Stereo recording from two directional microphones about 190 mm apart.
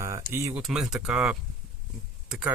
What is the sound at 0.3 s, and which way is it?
Speech, 10° right (ahead or behind).